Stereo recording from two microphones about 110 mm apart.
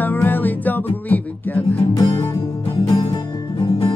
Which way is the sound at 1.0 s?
15° left (ahead or behind).